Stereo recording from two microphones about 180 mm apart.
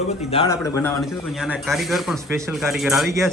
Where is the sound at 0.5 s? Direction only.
15° left (ahead or behind).